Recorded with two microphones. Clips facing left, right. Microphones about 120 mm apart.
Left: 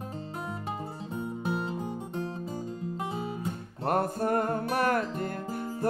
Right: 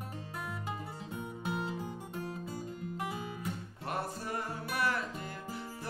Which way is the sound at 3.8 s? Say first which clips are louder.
Left 11 dB; 50° left (ahead or behind).